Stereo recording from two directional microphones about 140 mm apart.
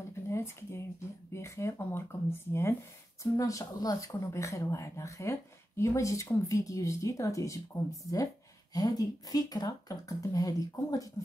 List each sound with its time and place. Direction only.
0.3 s speech: 20° left (ahead or behind)